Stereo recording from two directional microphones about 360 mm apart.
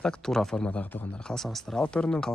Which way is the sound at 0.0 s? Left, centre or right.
Centre.